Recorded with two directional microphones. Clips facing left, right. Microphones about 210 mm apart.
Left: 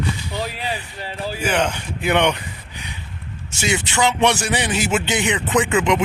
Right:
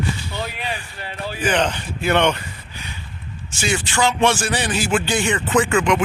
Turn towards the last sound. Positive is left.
turn(degrees=20)  # may be behind; listen again after turning